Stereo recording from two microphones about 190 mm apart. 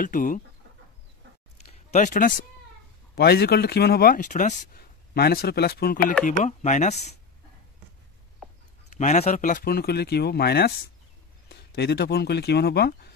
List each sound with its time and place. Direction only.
0.0 s speech: 45° left (ahead or behind)
1.7 s speech: 35° left (ahead or behind)
3.2 s speech: 55° left (ahead or behind); by 4.8 s 40° left (ahead or behind)
5.1 s speech: 55° left (ahead or behind)
6.4 s speech: 40° left (ahead or behind)
8.9 s speech: 35° left (ahead or behind); by 13.1 s 60° left (ahead or behind)